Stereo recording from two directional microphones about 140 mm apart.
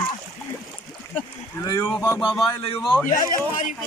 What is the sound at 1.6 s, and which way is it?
Speech, 20° left (ahead or behind).